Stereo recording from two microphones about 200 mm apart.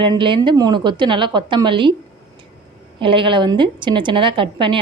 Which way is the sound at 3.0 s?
25° right (ahead or behind).